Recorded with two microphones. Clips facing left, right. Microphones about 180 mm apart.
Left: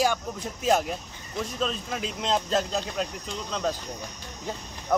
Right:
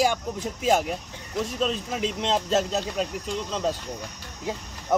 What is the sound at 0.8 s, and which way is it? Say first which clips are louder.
Speech: right 2 dB; 5° right (ahead or behind).